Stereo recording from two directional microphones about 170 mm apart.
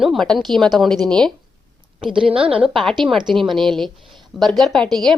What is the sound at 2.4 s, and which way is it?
A woman's voice, 5° right (ahead or behind).